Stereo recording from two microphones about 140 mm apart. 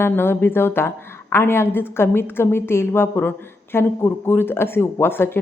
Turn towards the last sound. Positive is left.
turn(degrees=15)  # may be behind; listen again after turning